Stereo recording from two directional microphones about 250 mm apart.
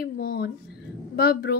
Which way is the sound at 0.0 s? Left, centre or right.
Left.